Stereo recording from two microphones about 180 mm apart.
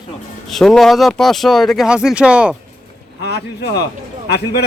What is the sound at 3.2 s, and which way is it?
Speech, 70° left (ahead or behind).